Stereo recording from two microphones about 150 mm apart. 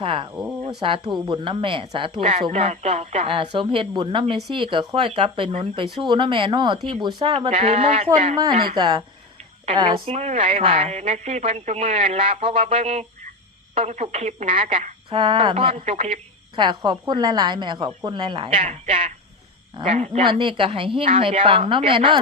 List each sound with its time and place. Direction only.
0.0 s a woman's voice: 35° right (ahead or behind)
8.4 s a woman's voice: 30° right (ahead or behind)